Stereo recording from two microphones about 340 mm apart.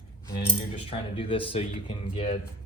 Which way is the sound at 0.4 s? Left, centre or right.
Centre.